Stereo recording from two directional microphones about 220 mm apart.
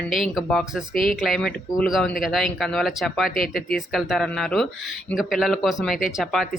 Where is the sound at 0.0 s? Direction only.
Centre (ahead or behind).